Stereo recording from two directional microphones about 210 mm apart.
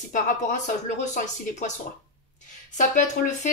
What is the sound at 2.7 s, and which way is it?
Speech, 35° left (ahead or behind).